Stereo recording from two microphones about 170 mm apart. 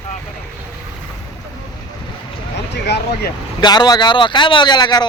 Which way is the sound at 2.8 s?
80° left.